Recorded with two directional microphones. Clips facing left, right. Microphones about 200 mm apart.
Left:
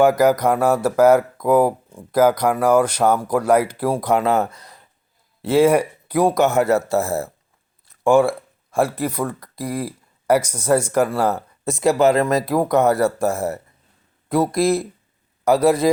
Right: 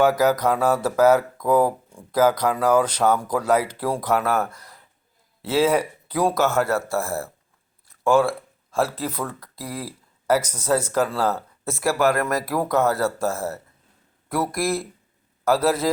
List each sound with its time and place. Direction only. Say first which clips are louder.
0.0 s speech: left 3 dB; 10° left (ahead or behind)